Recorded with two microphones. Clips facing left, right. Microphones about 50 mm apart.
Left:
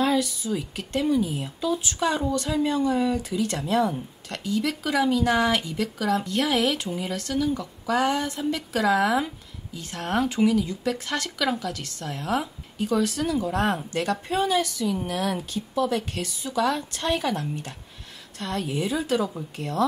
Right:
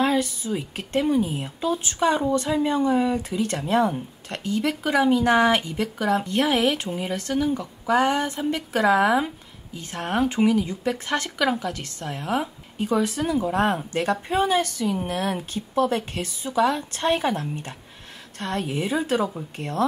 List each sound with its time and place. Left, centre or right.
0.0 s a sound: right
0.5 s speech: right
2.0 s speech: centre
14.6 s speech: right